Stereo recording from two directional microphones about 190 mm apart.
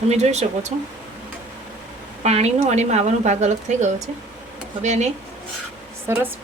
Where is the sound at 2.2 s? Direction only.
35° right (ahead or behind).